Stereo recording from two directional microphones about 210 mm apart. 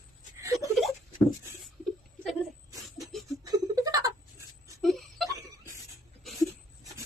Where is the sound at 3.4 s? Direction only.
15° right (ahead or behind).